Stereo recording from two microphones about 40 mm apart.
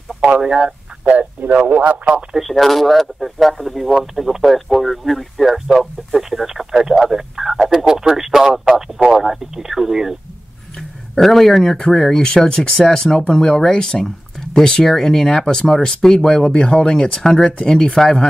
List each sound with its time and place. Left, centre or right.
0.4 s speech: centre
1.0 s a man's voice: right
2.3 s speech: centre
10.8 s speech: centre
17.2 s speech: centre